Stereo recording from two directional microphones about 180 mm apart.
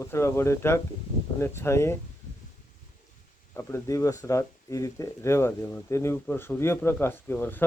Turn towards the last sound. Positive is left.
turn(degrees=10)  # may be behind; listen again after turning